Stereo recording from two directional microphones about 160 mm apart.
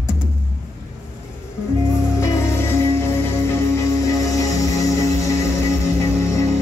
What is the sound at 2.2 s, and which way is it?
Music, 15° left (ahead or behind).